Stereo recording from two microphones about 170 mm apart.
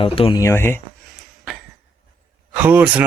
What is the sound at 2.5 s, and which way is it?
Speech, 5° right (ahead or behind).